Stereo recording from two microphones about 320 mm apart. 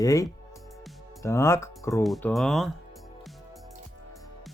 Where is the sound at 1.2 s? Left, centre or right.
Centre.